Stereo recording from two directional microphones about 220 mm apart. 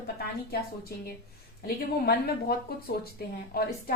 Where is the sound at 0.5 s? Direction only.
45° left (ahead or behind).